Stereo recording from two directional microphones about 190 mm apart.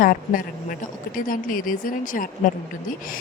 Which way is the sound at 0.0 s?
45° left (ahead or behind).